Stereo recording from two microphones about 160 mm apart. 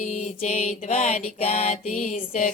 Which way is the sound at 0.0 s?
50° left (ahead or behind).